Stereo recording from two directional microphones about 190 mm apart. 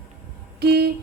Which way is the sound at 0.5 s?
55° right (ahead or behind).